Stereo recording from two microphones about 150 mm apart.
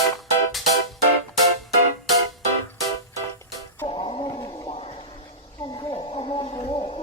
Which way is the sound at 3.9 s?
35° left (ahead or behind).